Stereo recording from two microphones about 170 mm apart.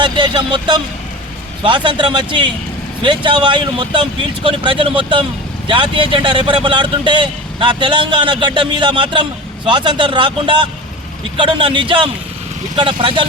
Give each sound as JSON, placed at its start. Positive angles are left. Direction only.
{"t": 0.0, "sound": "speech", "side_deg": -25}